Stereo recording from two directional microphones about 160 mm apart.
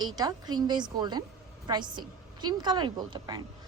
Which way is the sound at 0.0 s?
25° right (ahead or behind).